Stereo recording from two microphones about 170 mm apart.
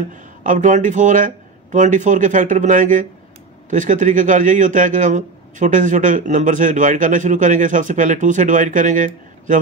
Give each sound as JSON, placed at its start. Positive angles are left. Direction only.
{"t": 0.1, "sound": "a man's voice", "side_deg": -50}